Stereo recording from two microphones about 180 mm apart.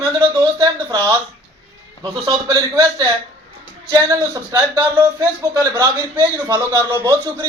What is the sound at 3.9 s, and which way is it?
A man's voice, 20° right (ahead or behind).